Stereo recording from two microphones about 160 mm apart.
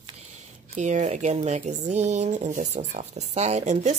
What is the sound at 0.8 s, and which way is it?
Speech, 50° right (ahead or behind).